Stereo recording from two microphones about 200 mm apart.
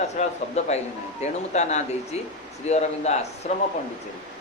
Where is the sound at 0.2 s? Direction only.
35° left (ahead or behind).